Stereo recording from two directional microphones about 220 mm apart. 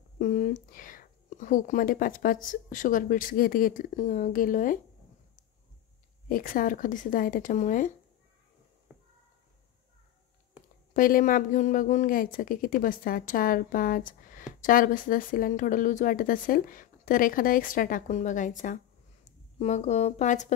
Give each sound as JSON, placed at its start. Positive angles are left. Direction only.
{"t": 0.2, "sound": "speech", "side_deg": 35}
{"t": 6.2, "sound": "speech", "side_deg": 40}
{"t": 8.9, "sound": "a sound", "side_deg": -10}
{"t": 10.9, "sound": "speech", "side_deg": 40}